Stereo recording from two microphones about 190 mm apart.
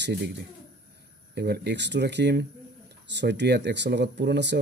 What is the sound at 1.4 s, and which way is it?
Speech, 60° right (ahead or behind).